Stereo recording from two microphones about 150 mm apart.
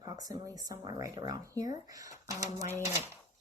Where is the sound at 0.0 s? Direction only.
25° right (ahead or behind).